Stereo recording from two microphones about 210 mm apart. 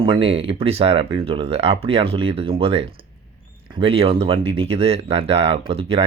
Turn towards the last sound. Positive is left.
turn(degrees=-25)  # may be behind; listen again after turning